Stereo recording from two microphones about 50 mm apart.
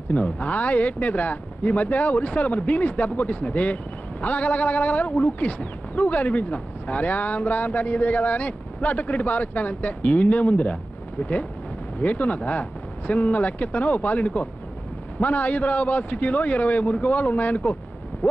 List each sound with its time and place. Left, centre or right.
0.1 s speech: left
12.0 s speech: left
18.2 s a sound: left